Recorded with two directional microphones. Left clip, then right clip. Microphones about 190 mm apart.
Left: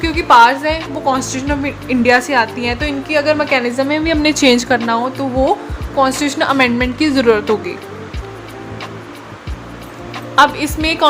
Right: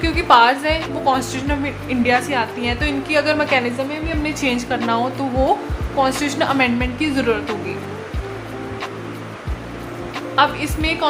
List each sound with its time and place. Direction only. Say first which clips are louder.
0.0 s a woman's voice: left 4 dB; 10° left (ahead or behind)
3.8 s a woman's voice: left 8 dB; 35° left (ahead or behind)
4.9 s a woman's voice: left 3 dB; 20° left (ahead or behind)
10.3 s a woman's voice: left 6 dB; 25° left (ahead or behind)